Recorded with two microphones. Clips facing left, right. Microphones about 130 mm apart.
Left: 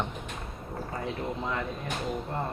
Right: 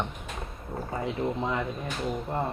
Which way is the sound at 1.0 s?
15° right (ahead or behind).